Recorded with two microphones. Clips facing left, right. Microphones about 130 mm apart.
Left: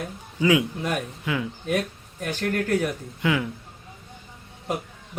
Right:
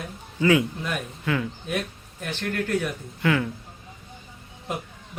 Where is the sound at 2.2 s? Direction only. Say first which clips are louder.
Left 3 dB; 40° left (ahead or behind).